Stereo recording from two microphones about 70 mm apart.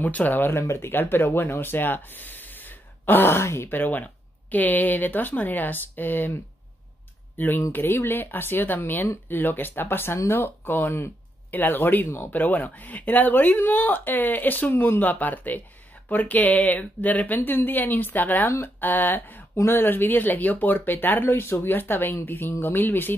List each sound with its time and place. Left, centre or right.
0.0 s speech: left
7.3 s speech: left